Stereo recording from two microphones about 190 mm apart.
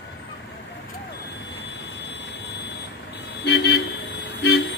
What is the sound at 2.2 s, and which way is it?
Vehicle, 65° left (ahead or behind).